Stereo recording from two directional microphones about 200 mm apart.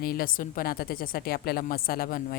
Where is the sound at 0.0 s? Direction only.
45° left (ahead or behind).